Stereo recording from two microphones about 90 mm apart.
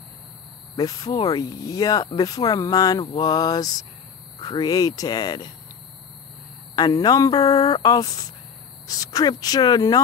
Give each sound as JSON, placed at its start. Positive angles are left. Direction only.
{"t": 0.7, "sound": "speech", "side_deg": 45}
{"t": 6.7, "sound": "speech", "side_deg": 50}